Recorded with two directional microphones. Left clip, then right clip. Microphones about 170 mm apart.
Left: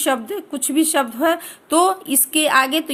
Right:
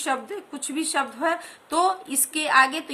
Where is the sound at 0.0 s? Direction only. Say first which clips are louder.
Left 6 dB; 50° left (ahead or behind).